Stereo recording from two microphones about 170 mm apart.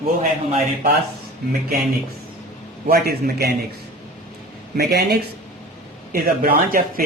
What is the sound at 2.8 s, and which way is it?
Speech, 65° right (ahead or behind).